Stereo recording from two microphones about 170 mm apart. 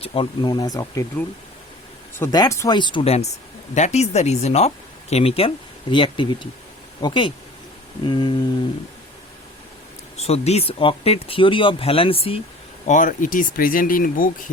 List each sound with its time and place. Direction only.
0.0 s speech: 30° left (ahead or behind)
2.1 s speech: 20° left (ahead or behind)
10.2 s speech: 40° left (ahead or behind)
12.9 s speech: 50° left (ahead or behind)